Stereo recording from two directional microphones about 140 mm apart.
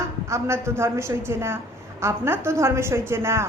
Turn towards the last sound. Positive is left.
turn(degrees=-20)  # may be behind; listen again after turning